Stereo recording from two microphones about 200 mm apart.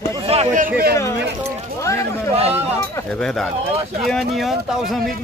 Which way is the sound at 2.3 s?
30° right (ahead or behind).